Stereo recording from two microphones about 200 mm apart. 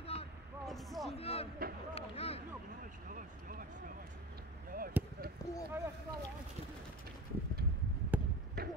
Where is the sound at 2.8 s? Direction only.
40° right (ahead or behind).